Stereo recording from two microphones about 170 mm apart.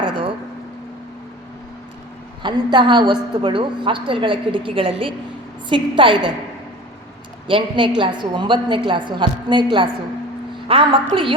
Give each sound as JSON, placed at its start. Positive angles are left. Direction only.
{"t": 0.0, "sound": "a sound", "side_deg": -30}
{"t": 2.4, "sound": "a woman's voice", "side_deg": -25}
{"t": 7.4, "sound": "a woman's voice", "side_deg": -30}